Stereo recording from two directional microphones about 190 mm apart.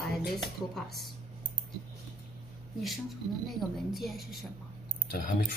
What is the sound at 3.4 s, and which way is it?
A woman's voice, centre (ahead or behind).